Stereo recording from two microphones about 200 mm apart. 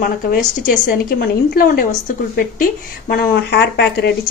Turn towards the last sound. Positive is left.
turn(degrees=55)  # may be behind; listen again after turning